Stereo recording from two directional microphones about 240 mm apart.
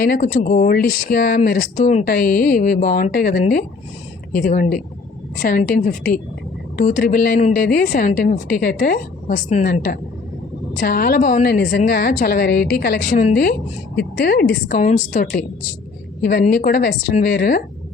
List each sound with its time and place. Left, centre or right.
0.0 s speech: left